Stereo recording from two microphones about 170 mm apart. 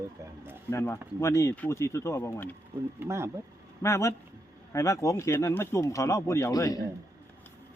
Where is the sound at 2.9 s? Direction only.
15° right (ahead or behind).